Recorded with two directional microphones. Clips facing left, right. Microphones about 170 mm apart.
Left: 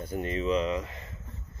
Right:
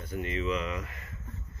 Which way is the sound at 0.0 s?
40° left (ahead or behind).